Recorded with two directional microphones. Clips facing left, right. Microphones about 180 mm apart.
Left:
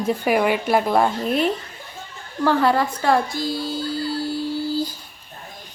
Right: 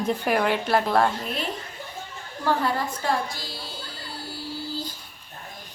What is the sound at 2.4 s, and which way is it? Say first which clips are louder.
Speech: left 6 dB; 85° left.